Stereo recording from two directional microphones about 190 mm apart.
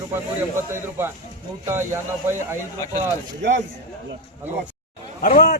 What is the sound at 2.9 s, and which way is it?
Speech, 40° right (ahead or behind).